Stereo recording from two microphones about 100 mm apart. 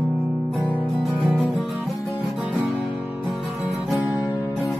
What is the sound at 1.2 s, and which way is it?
Music, 15° right (ahead or behind).